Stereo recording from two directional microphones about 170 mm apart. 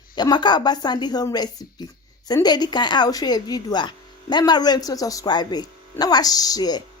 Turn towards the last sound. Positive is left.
turn(degrees=20)  # may be behind; listen again after turning